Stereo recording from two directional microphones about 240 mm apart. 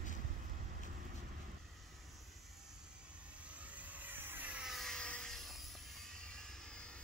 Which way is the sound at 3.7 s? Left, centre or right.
Centre.